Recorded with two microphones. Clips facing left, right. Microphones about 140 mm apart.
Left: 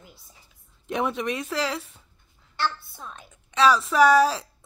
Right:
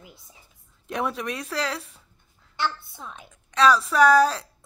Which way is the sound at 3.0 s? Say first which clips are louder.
Right 1 dB; 10° right (ahead or behind).